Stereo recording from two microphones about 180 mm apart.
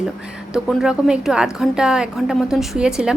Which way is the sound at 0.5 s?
5° right (ahead or behind).